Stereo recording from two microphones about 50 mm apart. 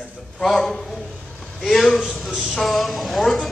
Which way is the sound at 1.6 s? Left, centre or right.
Centre.